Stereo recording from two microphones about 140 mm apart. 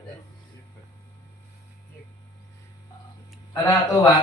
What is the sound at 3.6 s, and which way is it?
Speech, 20° left (ahead or behind).